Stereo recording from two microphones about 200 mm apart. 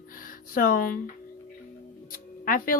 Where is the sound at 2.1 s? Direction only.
45° left (ahead or behind).